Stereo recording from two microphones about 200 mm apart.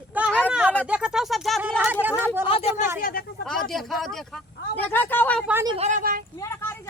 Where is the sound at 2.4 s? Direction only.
30° left (ahead or behind).